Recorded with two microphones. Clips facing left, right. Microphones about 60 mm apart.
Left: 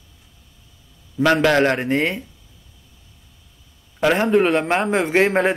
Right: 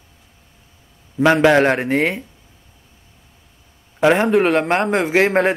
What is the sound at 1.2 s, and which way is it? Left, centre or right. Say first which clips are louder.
Speech: right 3 dB; centre.